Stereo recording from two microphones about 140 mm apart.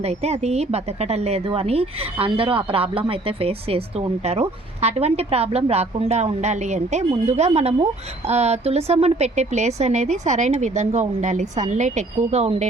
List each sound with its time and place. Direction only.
0.0 s a woman's voice: 50° right (ahead or behind)